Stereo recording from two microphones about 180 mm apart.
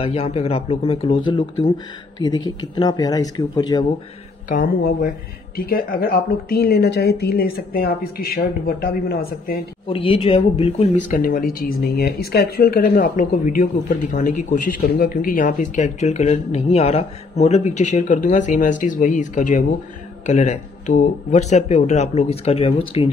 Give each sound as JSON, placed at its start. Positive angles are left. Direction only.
{"t": 0.0, "sound": "speech", "side_deg": 30}
{"t": 4.5, "sound": "speech", "side_deg": 50}
{"t": 9.8, "sound": "speech", "side_deg": 30}
{"t": 11.1, "sound": "speech", "side_deg": 55}